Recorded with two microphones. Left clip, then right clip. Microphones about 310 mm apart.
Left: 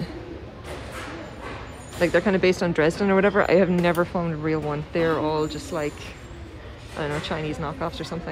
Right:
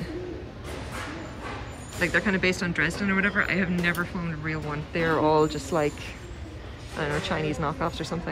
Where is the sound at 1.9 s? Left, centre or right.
Centre.